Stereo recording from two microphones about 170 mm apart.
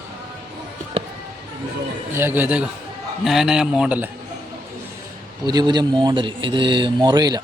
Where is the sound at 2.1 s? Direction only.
10° right (ahead or behind).